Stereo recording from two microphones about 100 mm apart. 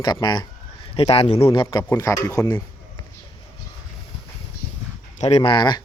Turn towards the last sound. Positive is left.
turn(degrees=50)  # may be behind; listen again after turning